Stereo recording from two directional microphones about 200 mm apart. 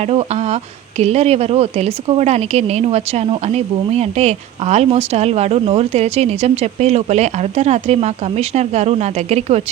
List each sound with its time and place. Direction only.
0.0 s speech: 30° right (ahead or behind)